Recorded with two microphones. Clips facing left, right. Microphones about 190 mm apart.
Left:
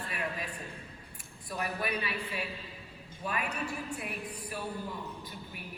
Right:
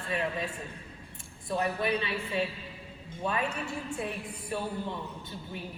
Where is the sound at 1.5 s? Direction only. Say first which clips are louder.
Right 6 dB; 25° right (ahead or behind).